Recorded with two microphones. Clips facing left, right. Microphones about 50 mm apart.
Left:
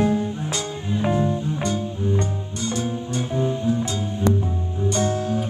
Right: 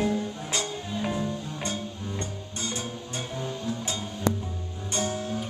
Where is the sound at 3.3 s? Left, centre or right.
Left.